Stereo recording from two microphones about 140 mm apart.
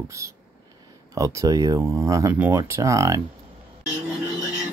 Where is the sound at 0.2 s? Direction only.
20° right (ahead or behind).